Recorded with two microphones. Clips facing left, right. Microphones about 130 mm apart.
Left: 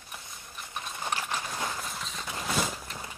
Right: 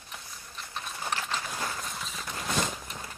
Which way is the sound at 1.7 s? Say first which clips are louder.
Even; centre (ahead or behind).